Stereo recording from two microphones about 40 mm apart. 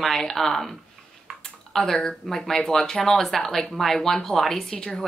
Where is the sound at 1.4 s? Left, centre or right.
Centre.